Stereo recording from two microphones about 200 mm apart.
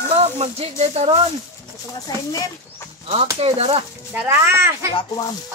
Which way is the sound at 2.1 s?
20° left (ahead or behind).